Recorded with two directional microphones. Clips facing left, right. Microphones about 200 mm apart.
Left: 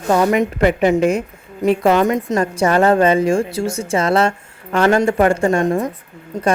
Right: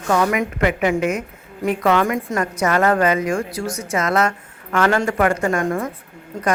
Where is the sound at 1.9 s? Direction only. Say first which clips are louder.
Left 4 dB; 20° left (ahead or behind).